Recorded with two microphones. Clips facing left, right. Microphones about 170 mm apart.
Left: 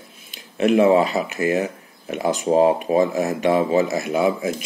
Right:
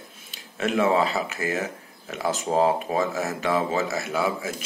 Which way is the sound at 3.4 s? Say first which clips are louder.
Left 7 dB; 35° left (ahead or behind).